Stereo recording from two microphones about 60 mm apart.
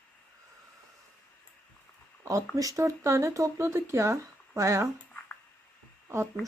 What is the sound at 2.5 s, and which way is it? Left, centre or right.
Speech, right.